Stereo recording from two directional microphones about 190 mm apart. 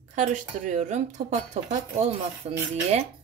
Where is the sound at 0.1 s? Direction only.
40° right (ahead or behind).